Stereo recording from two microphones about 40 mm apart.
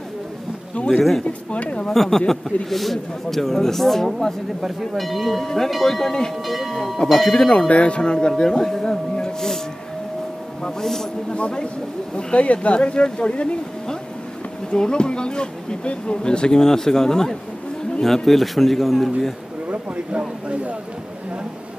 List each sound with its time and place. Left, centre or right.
1.2 s speech: left
1.9 s a man's voice: centre
4.6 s a man's voice: centre
7.3 s a man's voice: left; by 9.6 s centre
10.6 s a man's voice: centre
11.3 s speech: left
14.7 s a man's voice: left; by 19.3 s centre
19.7 s speech: right